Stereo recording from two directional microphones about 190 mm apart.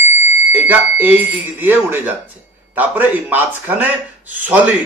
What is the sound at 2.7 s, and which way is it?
A man's voice, 10° right (ahead or behind).